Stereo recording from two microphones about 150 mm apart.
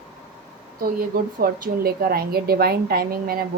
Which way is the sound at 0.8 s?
75° right (ahead or behind).